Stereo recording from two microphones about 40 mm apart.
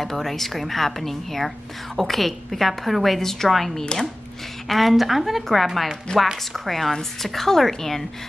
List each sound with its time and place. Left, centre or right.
0.0 s a woman's voice: centre
3.7 s chopping: left
4.6 s a woman's voice: centre